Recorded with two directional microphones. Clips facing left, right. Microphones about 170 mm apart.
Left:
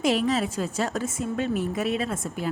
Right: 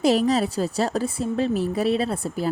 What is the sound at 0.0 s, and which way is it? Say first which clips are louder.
A woman's voice: right 4 dB; 35° right (ahead or behind).